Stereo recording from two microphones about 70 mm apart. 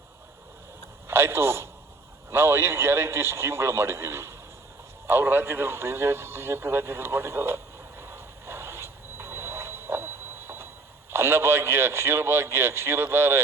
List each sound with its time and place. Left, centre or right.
1.0 s a man's voice: right
5.0 s a sound: right
11.1 s a man's voice: right